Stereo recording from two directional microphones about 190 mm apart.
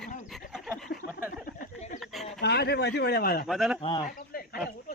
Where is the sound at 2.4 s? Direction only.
60° left (ahead or behind).